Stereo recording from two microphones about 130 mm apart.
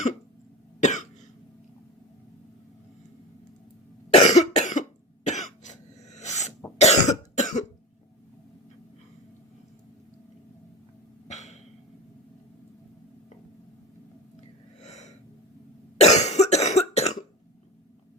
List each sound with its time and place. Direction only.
0.8 s cough: 70° left (ahead or behind)
4.1 s cough: 60° left (ahead or behind)
11.3 s a sound: 65° left (ahead or behind)
14.8 s gasp: 60° left (ahead or behind)
16.0 s cough: 55° left (ahead or behind)